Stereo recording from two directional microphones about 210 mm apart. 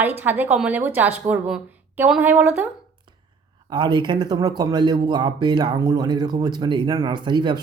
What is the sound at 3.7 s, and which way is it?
A woman's voice, 20° right (ahead or behind).